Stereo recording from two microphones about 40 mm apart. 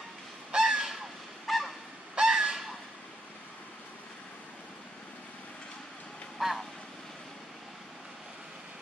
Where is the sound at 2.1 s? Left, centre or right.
Centre.